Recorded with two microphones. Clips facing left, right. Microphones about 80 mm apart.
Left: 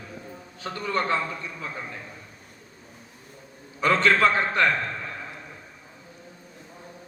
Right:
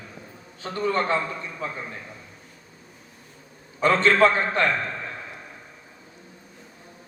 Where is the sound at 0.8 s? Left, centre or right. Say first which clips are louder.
Right 2 dB; right.